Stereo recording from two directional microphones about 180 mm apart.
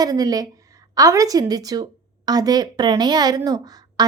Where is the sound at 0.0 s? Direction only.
20° right (ahead or behind).